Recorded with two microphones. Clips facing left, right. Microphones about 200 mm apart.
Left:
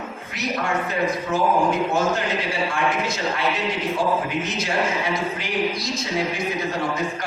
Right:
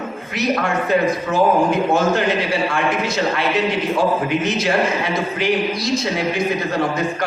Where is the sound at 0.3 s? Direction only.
70° right (ahead or behind).